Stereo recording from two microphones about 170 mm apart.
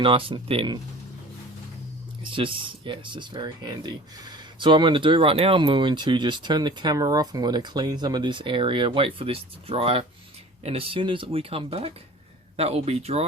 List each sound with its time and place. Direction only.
0.0 s speech: 30° right (ahead or behind)
2.2 s speech: 30° right (ahead or behind)